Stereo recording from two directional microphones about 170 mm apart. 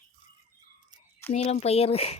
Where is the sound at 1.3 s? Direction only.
40° left (ahead or behind).